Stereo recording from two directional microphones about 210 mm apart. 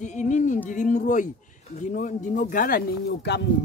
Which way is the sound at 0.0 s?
35° left (ahead or behind).